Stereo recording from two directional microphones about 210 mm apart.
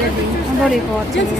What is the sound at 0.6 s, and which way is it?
Speech, centre (ahead or behind).